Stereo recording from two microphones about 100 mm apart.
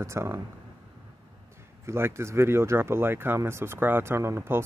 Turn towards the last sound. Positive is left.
turn(degrees=-25)  # may be behind; listen again after turning